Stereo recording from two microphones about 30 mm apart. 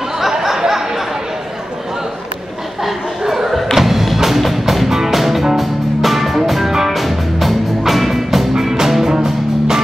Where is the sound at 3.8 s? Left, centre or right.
Centre.